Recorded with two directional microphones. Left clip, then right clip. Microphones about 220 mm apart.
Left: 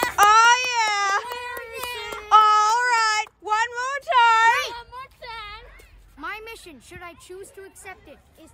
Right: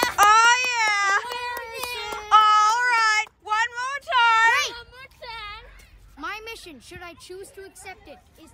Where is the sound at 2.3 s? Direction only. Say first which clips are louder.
Left 1 dB; 30° left (ahead or behind).